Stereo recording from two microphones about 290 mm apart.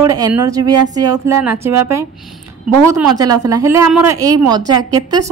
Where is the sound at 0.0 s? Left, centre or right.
Centre.